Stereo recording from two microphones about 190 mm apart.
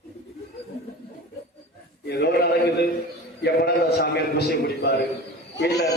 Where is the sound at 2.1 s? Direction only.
60° left (ahead or behind).